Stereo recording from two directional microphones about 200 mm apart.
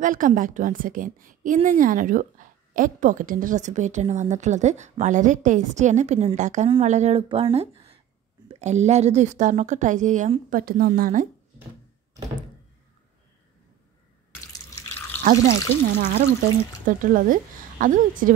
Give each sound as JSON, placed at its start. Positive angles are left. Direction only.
{"t": 0.0, "sound": "a woman's voice", "side_deg": -40}
{"t": 15.3, "sound": "a woman's voice", "side_deg": -45}